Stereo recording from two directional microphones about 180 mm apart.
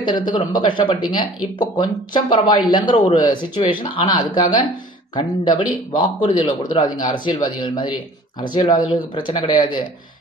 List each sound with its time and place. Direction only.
0.0 s speech: 25° left (ahead or behind)